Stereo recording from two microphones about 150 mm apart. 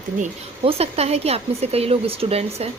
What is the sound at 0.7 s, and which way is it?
Speech, 45° right (ahead or behind).